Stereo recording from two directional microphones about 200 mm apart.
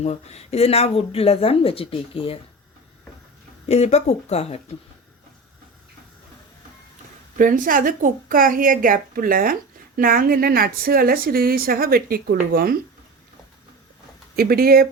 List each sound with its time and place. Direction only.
0.0 s speech: 35° left (ahead or behind)
3.7 s speech: 35° left (ahead or behind)
7.3 s speech: 40° right (ahead or behind)
14.3 s speech: 50° right (ahead or behind)